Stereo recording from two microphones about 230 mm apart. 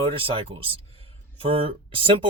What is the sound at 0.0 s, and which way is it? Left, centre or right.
Speech, right.